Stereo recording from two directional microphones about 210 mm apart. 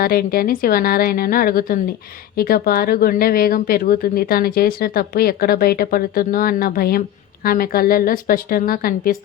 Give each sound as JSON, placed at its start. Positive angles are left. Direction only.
{"t": 0.0, "sound": "speech", "side_deg": 45}